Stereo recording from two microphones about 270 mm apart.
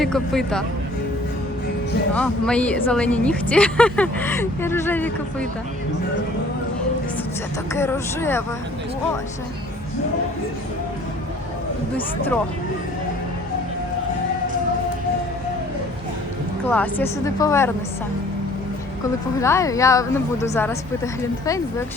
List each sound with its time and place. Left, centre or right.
0.0 s speech: centre
2.1 s speech: centre
7.7 s speech: centre
11.9 s speech: centre
16.6 s speech: centre
19.4 s speech: centre